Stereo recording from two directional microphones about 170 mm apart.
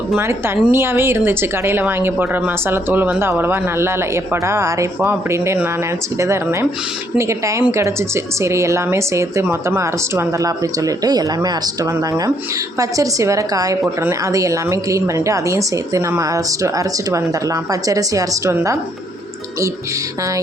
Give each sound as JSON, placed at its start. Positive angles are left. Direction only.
{"t": 0.1, "sound": "a woman's voice", "side_deg": -15}